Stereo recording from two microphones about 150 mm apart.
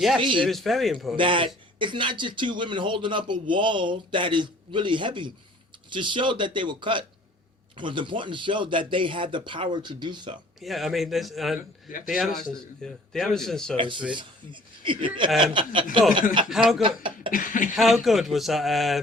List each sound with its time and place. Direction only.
0.2 s speech: 35° right (ahead or behind)
0.4 s a man's voice: centre (ahead or behind)
1.1 s speech: 35° right (ahead or behind)
10.6 s a man's voice: centre (ahead or behind)
13.7 s speech: 35° right (ahead or behind)
16.5 s a man's voice: centre (ahead or behind)
16.8 s speech: 35° right (ahead or behind)
17.3 s speech: 65° left (ahead or behind)
17.7 s a man's voice: centre (ahead or behind)